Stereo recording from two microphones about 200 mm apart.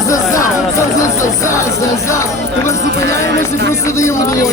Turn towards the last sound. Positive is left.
turn(degrees=15)  # may be behind; listen again after turning